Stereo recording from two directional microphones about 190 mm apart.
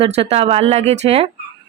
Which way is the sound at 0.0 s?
30° right (ahead or behind).